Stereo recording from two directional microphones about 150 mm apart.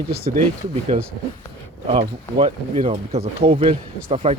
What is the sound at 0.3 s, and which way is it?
Speech, 55° right (ahead or behind).